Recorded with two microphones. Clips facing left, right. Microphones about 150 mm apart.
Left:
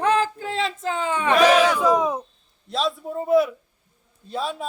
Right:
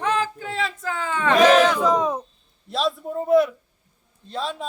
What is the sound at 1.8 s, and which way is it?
Speech, 10° left (ahead or behind).